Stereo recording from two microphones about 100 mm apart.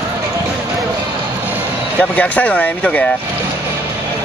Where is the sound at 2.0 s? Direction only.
15° left (ahead or behind).